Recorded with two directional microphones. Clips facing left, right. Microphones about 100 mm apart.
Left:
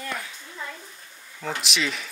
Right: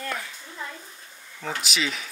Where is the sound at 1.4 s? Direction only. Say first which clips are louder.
Left 1 dB; centre (ahead or behind).